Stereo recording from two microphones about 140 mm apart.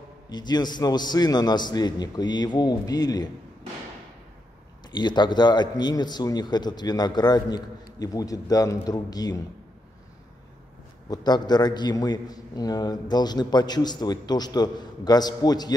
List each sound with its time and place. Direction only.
0.3 s a man's voice: 30° left (ahead or behind)
4.9 s a man's voice: 30° left (ahead or behind)
11.1 s a man's voice: 30° left (ahead or behind)